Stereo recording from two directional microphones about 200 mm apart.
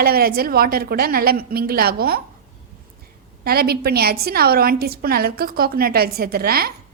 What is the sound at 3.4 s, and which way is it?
A woman's voice, 50° right (ahead or behind).